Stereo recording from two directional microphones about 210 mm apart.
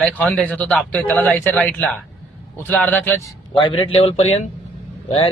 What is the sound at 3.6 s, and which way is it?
Speech, 25° left (ahead or behind).